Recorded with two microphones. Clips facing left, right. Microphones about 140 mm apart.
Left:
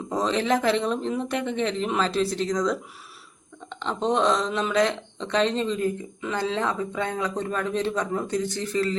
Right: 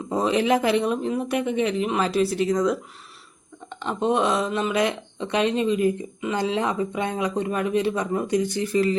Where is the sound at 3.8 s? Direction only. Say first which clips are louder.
Right 1 dB; 10° right (ahead or behind).